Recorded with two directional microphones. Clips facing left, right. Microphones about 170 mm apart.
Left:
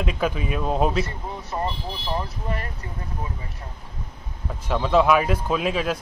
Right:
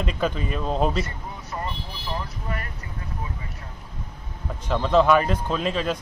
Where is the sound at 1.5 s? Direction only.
25° left (ahead or behind).